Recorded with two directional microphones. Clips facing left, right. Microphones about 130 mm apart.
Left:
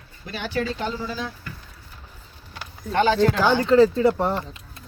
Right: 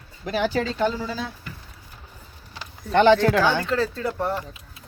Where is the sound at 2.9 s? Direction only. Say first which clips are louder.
Right 3 dB; 75° right (ahead or behind).